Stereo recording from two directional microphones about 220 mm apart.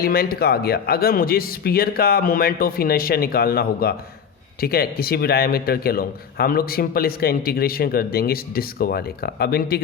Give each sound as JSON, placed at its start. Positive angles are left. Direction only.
{"t": 0.0, "sound": "a man's voice", "side_deg": 45}